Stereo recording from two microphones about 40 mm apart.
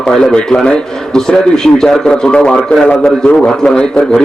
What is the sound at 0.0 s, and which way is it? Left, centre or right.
Speech, centre.